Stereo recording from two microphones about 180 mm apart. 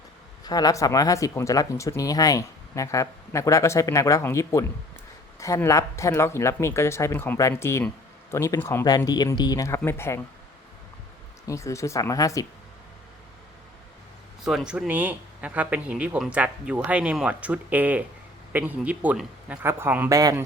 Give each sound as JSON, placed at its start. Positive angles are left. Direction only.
{"t": 0.4, "sound": "speech", "side_deg": 20}
{"t": 11.4, "sound": "speech", "side_deg": 15}
{"t": 14.4, "sound": "speech", "side_deg": -5}